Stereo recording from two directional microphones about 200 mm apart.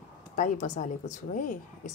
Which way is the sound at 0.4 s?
40° left (ahead or behind).